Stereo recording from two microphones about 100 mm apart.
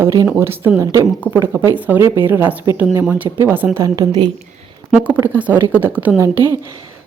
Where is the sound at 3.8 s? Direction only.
40° right (ahead or behind).